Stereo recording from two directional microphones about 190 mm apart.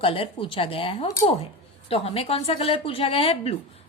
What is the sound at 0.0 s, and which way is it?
A woman's voice, 30° left (ahead or behind).